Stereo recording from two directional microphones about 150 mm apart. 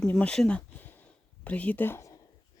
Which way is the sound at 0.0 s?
10° left (ahead or behind).